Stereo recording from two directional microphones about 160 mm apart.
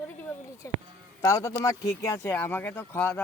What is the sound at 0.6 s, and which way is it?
Speech, 20° left (ahead or behind).